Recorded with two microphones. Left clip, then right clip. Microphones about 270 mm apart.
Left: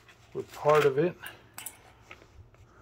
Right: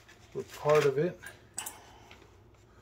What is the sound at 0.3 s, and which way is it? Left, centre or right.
Speech, left.